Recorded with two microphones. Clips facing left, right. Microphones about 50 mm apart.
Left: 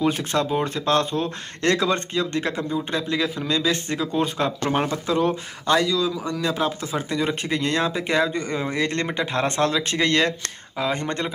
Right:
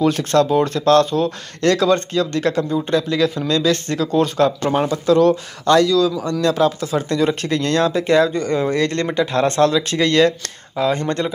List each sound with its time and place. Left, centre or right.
0.0 s speech: centre